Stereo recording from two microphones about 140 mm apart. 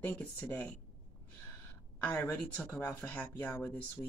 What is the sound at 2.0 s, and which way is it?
Speech, 10° left (ahead or behind).